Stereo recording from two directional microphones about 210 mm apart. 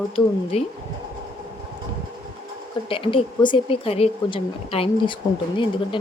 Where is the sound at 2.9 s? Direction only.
25° left (ahead or behind).